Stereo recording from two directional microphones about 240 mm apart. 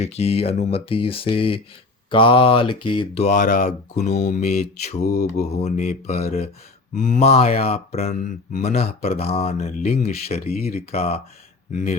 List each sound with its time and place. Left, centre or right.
0.0 s speech: left
8.5 s speech: left
9.0 s speech: left